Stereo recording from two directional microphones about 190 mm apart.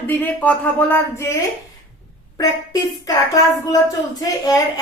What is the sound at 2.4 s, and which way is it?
Speech, 20° left (ahead or behind).